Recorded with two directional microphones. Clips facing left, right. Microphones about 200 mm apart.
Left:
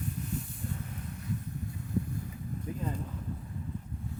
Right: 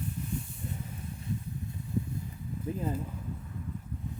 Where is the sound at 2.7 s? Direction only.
25° right (ahead or behind).